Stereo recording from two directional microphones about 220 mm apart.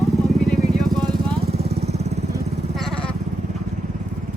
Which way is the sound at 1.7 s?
30° right (ahead or behind).